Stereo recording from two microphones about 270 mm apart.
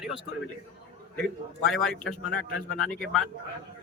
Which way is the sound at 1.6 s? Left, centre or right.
Centre.